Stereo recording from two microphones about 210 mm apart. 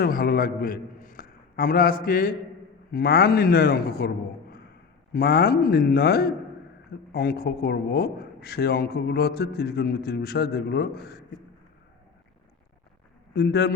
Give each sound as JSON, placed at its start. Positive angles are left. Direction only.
{"t": 0.0, "sound": "a man's voice", "side_deg": 45}
{"t": 5.1, "sound": "speech", "side_deg": 50}
{"t": 13.3, "sound": "speech", "side_deg": 50}